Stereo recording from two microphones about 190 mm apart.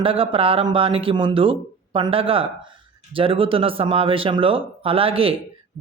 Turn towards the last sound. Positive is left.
turn(degrees=-30)  # may be behind; listen again after turning